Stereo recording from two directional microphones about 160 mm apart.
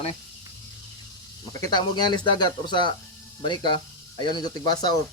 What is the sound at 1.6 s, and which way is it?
Speech, 25° left (ahead or behind).